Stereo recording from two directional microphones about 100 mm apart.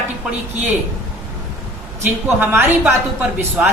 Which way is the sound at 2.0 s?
20° right (ahead or behind).